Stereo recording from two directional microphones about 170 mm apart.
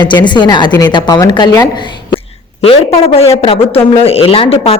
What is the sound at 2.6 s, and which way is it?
A man's voice, 35° left (ahead or behind).